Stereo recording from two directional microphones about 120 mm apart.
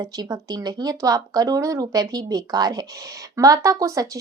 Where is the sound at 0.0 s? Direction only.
35° right (ahead or behind).